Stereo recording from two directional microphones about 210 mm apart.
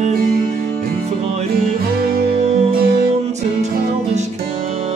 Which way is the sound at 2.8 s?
45° right (ahead or behind).